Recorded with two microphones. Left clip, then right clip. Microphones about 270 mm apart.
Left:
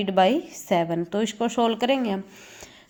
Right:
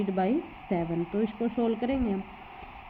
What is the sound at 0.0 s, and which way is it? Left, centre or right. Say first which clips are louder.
A woman's voice: left 8 dB; centre.